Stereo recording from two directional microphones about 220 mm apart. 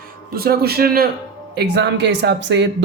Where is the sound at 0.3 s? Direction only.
45° right (ahead or behind).